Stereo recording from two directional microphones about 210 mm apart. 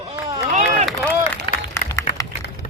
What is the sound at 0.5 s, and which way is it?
Run, 35° right (ahead or behind).